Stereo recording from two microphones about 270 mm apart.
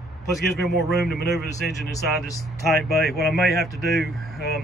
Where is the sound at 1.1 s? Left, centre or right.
Left.